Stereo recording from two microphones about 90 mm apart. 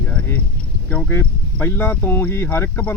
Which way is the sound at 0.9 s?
20° left (ahead or behind).